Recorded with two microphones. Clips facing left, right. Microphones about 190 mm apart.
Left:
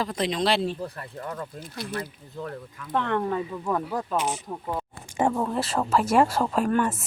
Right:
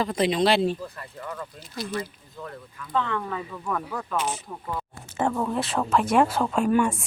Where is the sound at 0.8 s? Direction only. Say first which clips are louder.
Left 3 dB; 50° left (ahead or behind).